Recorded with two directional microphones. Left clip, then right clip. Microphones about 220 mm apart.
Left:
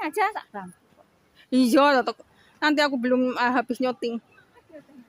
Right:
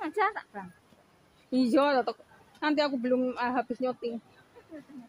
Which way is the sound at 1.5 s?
30° left (ahead or behind).